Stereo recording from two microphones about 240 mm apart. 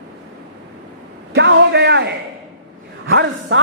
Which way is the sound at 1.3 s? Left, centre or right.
Right.